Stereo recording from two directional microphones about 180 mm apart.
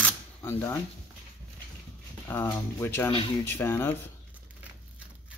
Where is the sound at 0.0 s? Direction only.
10° left (ahead or behind).